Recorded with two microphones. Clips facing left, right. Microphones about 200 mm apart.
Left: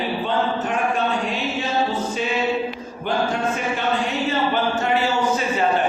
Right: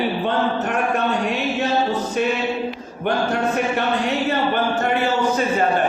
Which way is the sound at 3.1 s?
60° right (ahead or behind).